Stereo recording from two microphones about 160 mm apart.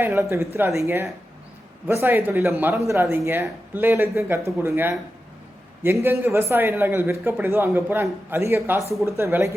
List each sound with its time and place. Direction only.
0.0 s a man's voice: 15° right (ahead or behind)